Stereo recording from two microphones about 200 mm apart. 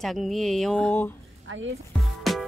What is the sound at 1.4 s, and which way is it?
Speech, 75° right (ahead or behind).